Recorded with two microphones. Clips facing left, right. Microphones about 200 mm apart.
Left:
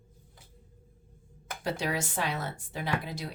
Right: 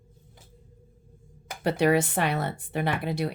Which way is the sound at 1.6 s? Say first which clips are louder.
Right 10 dB; 60° right (ahead or behind).